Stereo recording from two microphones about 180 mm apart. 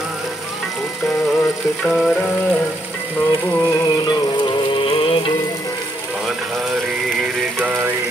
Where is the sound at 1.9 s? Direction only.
Centre (ahead or behind).